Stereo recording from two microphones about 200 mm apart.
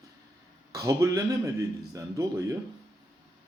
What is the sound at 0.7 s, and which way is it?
Speech, 15° right (ahead or behind).